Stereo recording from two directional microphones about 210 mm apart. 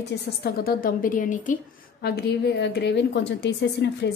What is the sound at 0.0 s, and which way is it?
A woman's voice, 50° left (ahead or behind).